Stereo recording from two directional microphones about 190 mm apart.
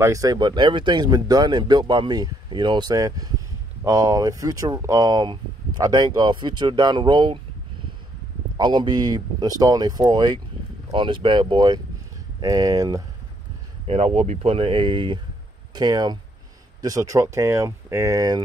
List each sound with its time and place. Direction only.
0.0 s speech: 15° right (ahead or behind)
8.5 s speech: 25° right (ahead or behind)
13.8 s speech: 35° right (ahead or behind); by 18.4 s 20° right (ahead or behind)